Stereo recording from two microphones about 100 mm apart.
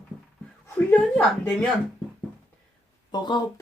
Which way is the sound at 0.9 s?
10° left (ahead or behind).